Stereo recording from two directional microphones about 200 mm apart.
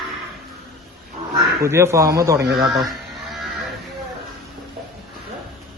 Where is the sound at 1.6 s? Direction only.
15° right (ahead or behind).